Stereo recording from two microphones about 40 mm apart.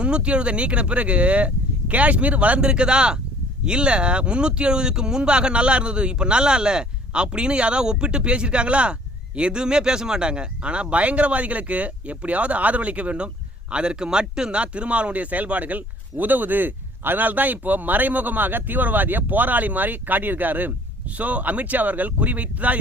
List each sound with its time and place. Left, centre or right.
0.0 s speech: right
14.6 s speech: right
21.2 s speech: right